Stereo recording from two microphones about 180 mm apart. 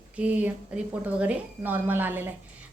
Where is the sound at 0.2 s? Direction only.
10° right (ahead or behind).